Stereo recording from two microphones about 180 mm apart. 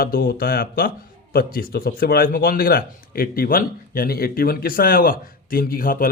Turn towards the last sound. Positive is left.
turn(degrees=50)  # may be behind; listen again after turning